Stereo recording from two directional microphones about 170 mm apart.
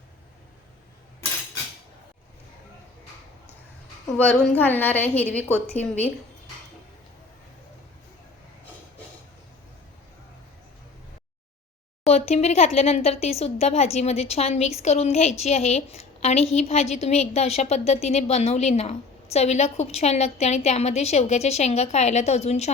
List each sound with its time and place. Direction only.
4.2 s a woman's voice: 10° left (ahead or behind)
12.0 s speech: 40° left (ahead or behind)